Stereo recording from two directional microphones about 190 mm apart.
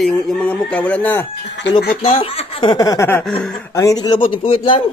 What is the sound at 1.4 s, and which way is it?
Speech, 70° left (ahead or behind).